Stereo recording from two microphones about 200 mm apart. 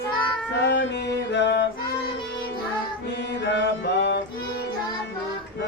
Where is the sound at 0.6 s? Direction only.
60° left (ahead or behind).